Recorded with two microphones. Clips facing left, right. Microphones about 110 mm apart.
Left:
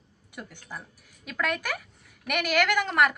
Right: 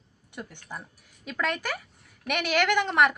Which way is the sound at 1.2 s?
5° left (ahead or behind).